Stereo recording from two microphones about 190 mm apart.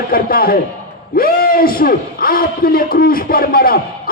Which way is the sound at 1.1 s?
50° left (ahead or behind).